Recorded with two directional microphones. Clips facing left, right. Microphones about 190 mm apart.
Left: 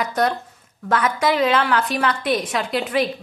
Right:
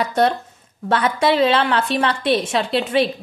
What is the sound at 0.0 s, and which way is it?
A woman's voice, 30° right (ahead or behind).